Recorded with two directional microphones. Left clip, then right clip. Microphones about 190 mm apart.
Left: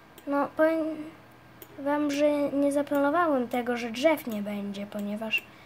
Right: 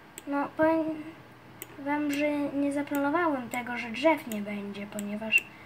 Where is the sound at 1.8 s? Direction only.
55° left (ahead or behind).